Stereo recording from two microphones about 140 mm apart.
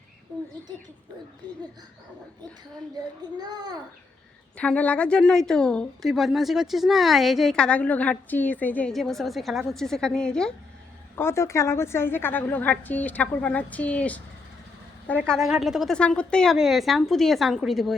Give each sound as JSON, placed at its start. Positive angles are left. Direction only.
{"t": 3.3, "sound": "a child's voice", "side_deg": -30}
{"t": 4.5, "sound": "a woman's voice", "side_deg": 10}
{"t": 11.2, "sound": "a woman's voice", "side_deg": 20}
{"t": 15.3, "sound": "a woman's voice", "side_deg": 0}
{"t": 16.0, "sound": "a woman's voice", "side_deg": 10}